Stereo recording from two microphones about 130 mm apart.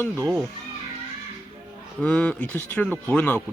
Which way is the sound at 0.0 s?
10° left (ahead or behind).